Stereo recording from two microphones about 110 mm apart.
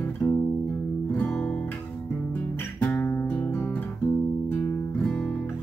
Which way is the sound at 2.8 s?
20° left (ahead or behind).